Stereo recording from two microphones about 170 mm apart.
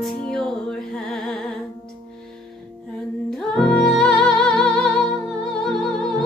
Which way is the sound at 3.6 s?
5° left (ahead or behind).